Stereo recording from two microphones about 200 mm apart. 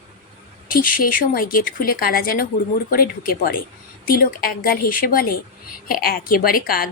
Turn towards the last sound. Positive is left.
turn(degrees=45)  # may be behind; listen again after turning